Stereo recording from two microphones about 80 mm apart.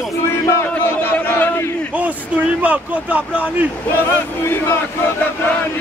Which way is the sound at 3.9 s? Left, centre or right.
Left.